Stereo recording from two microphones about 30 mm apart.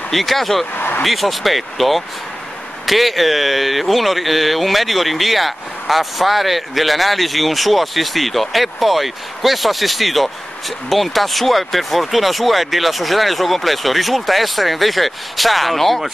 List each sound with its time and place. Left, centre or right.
0.1 s speech: centre
0.7 s speech: left
1.0 s speech: centre